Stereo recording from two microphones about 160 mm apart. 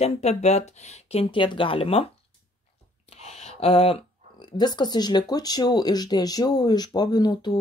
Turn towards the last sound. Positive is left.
turn(degrees=25)  # may be behind; listen again after turning